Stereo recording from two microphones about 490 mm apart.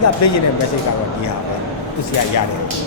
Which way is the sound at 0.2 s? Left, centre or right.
Left.